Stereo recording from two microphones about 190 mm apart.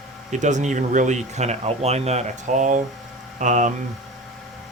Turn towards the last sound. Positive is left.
turn(degrees=-40)  # may be behind; listen again after turning